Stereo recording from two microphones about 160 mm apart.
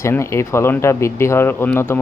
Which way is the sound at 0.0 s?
15° left (ahead or behind).